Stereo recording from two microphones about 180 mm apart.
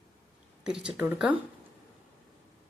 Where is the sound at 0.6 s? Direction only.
5° right (ahead or behind).